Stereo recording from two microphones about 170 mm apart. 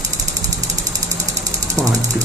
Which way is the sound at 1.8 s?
15° right (ahead or behind).